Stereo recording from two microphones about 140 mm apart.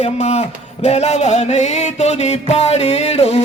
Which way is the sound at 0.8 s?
50° left (ahead or behind).